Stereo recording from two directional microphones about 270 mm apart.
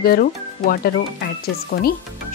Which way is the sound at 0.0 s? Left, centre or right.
Left.